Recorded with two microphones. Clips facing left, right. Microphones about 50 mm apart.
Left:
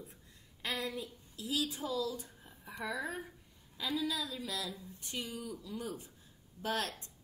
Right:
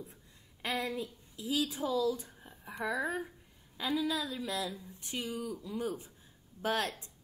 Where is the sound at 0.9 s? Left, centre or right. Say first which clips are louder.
Right 3 dB; centre.